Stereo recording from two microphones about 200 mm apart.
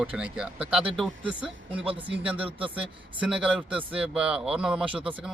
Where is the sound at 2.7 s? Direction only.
5° right (ahead or behind).